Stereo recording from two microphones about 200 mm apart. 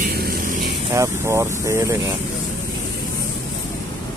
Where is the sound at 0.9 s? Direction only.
15° right (ahead or behind).